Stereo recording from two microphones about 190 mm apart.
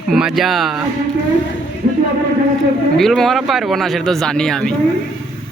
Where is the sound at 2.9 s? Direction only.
Centre (ahead or behind).